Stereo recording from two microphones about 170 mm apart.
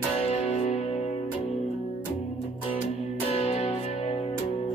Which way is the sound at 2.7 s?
40° left (ahead or behind).